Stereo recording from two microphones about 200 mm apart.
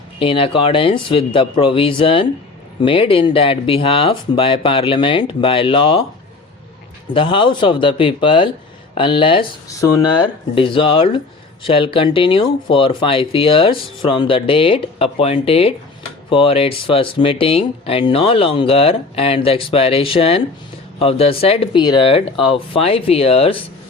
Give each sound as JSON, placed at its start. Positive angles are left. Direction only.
{"t": 0.2, "sound": "speech", "side_deg": 25}
{"t": 7.1, "sound": "speech", "side_deg": 25}